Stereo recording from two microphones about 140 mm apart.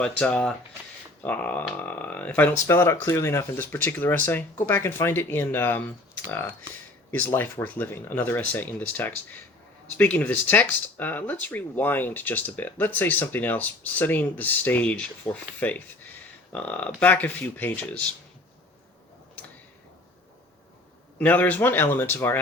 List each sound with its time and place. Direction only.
0.0 s speech: 5° left (ahead or behind)
7.1 s speech: 15° left (ahead or behind)
21.2 s speech: 10° left (ahead or behind)